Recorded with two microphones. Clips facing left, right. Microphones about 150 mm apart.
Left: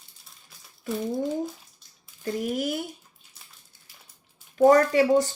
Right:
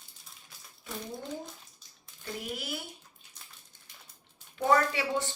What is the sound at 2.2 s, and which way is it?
Speech, 45° left (ahead or behind).